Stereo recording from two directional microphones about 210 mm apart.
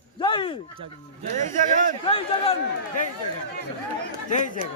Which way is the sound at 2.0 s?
25° left (ahead or behind).